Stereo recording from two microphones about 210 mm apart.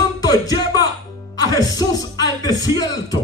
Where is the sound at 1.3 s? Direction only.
20° left (ahead or behind).